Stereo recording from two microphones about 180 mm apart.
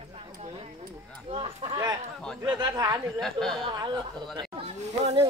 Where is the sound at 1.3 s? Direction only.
30° right (ahead or behind).